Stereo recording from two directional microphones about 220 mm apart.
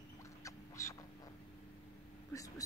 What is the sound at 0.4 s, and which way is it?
Duck, 15° left (ahead or behind).